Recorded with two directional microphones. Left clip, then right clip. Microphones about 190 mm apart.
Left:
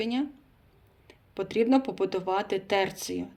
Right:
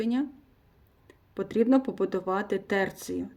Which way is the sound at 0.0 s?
45° right (ahead or behind).